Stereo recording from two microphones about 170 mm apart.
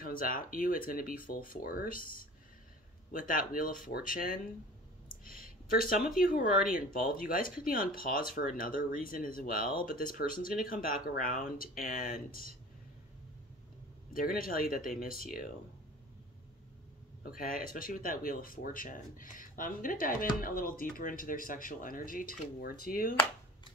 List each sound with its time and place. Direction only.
0.0 s speech: 55° left (ahead or behind)
14.1 s speech: 60° left (ahead or behind)
17.4 s speech: 55° left (ahead or behind)